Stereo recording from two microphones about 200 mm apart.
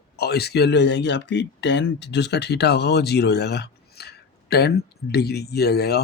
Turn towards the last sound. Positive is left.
turn(degrees=55)  # may be behind; listen again after turning